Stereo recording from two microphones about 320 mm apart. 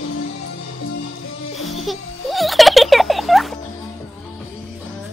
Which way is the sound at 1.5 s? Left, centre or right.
Centre.